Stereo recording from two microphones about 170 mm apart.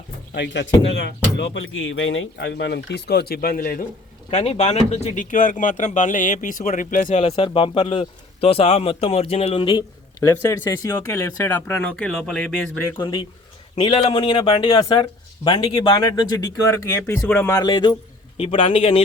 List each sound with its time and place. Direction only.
0.3 s speech: 90° left; by 3.8 s 55° left (ahead or behind)
4.3 s speech: 40° left (ahead or behind); by 12.9 s 10° left (ahead or behind)
13.0 s speech: 25° left (ahead or behind); by 17.5 s 10° left (ahead or behind)
17.5 s speech: 20° left (ahead or behind)